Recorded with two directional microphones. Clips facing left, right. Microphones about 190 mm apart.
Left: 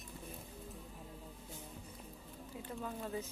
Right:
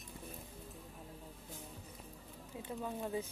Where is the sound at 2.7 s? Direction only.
15° right (ahead or behind).